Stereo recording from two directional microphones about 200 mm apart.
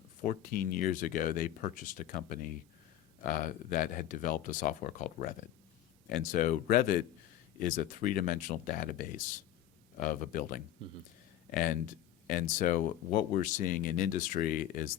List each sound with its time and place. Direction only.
0.3 s speech: 45° left (ahead or behind)